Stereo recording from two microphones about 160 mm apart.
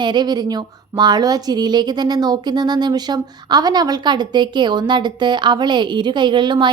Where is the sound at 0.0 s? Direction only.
30° right (ahead or behind).